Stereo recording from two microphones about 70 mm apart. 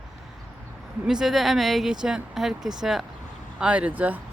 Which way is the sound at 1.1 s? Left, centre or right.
Centre.